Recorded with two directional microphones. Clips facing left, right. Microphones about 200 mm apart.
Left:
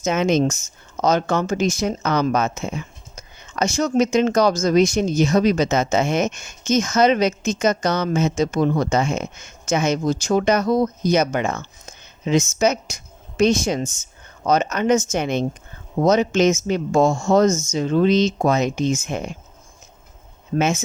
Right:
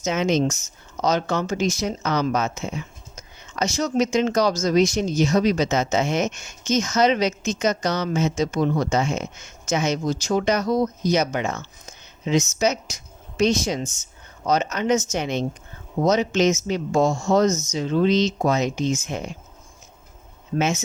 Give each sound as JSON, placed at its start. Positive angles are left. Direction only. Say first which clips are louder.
{"t": 0.0, "sound": "speech", "louder": "left 3 dB", "side_deg": 55}
{"t": 20.6, "sound": "speech", "louder": "left 3 dB", "side_deg": 50}